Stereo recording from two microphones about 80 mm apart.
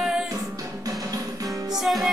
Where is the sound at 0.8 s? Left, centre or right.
Right.